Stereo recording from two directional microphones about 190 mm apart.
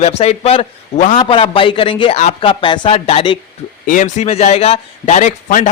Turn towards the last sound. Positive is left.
turn(degrees=40)  # may be behind; listen again after turning